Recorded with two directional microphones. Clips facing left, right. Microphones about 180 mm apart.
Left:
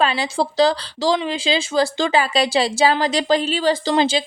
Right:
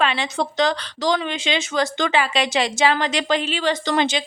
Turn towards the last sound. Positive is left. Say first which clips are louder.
# left 3 dB
turn(degrees=30)  # may be behind; listen again after turning